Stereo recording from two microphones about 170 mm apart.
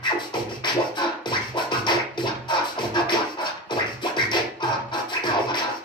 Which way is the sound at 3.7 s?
25° left (ahead or behind).